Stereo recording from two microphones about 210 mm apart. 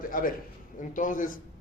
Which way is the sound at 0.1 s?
40° left (ahead or behind).